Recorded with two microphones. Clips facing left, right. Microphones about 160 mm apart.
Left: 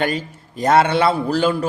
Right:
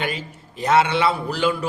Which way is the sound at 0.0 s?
45° left (ahead or behind).